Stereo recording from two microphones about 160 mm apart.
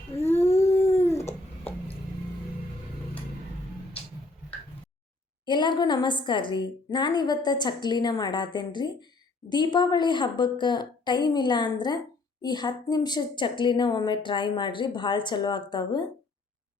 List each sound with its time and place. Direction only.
0.2 s a sound: 15° left (ahead or behind)
1.0 s babbling: 20° left (ahead or behind)
5.5 s a woman's voice: 30° left (ahead or behind)